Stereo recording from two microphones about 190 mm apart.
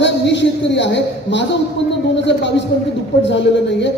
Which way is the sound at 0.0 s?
70° left (ahead or behind).